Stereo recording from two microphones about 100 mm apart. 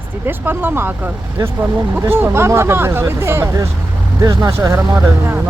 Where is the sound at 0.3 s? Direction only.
20° right (ahead or behind).